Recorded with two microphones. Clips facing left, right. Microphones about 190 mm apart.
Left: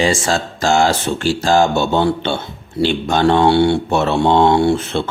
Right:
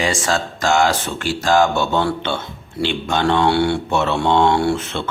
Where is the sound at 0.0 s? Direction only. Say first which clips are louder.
Left 3 dB; 30° left (ahead or behind).